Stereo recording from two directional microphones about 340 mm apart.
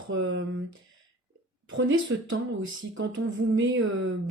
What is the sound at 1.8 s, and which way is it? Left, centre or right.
Speech, right.